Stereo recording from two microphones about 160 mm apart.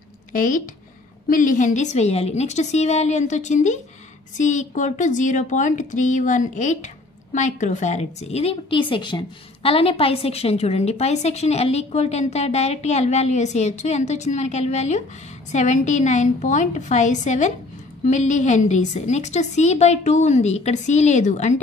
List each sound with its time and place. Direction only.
0.3 s a woman's voice: 55° left (ahead or behind)